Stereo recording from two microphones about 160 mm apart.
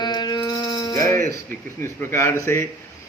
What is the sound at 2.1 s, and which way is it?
Speech, 15° left (ahead or behind).